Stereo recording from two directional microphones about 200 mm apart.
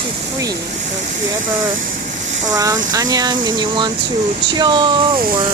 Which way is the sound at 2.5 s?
15° right (ahead or behind).